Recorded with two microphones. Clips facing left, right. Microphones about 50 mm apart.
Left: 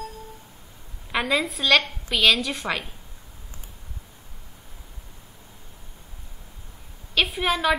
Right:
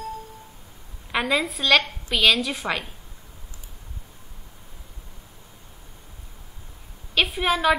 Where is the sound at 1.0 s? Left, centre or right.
Centre.